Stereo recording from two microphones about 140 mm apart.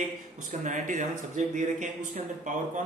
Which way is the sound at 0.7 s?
65° right (ahead or behind).